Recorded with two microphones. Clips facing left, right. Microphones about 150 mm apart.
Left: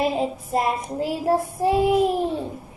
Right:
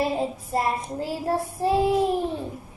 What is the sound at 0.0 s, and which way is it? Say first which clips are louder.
Child singing: left 2 dB; 20° left (ahead or behind).